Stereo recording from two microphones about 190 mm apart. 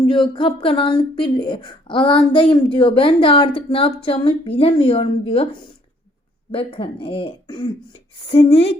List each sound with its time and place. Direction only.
0.1 s speech: 25° left (ahead or behind)